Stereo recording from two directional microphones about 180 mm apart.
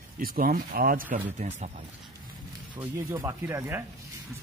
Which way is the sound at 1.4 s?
40° right (ahead or behind).